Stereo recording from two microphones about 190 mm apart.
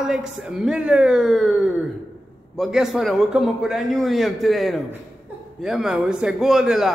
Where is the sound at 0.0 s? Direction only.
5° right (ahead or behind).